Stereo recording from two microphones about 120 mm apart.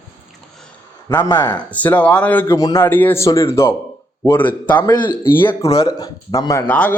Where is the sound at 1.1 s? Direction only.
15° left (ahead or behind).